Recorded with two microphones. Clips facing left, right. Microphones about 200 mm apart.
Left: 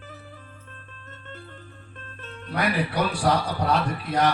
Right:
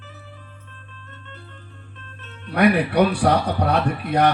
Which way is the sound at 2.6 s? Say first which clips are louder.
Right 8 dB; 65° right (ahead or behind).